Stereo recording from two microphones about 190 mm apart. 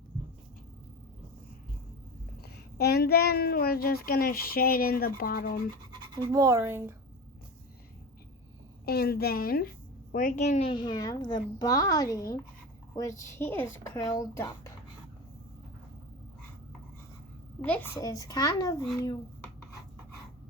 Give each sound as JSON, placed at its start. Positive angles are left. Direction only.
{"t": 2.4, "sound": "a child's voice", "side_deg": 55}
{"t": 6.1, "sound": "speech", "side_deg": -20}
{"t": 8.8, "sound": "a woman's voice", "side_deg": 55}
{"t": 17.6, "sound": "a woman's voice", "side_deg": 10}